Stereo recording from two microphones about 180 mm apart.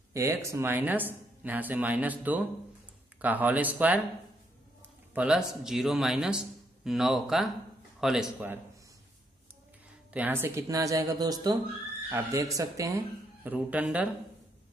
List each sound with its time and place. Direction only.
0.1 s speech: 15° right (ahead or behind)
5.1 s speech: 5° right (ahead or behind)
10.1 s speech: 10° right (ahead or behind)